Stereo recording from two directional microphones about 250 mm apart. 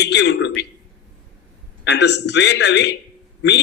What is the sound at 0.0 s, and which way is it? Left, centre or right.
Speech, left.